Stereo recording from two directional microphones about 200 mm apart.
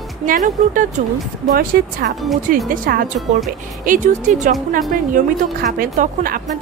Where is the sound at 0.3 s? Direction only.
40° right (ahead or behind).